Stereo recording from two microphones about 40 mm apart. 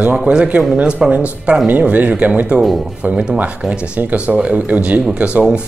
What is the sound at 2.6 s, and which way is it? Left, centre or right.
Speech, centre.